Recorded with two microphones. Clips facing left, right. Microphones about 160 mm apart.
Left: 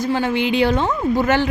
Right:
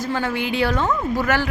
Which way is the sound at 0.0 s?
15° left (ahead or behind).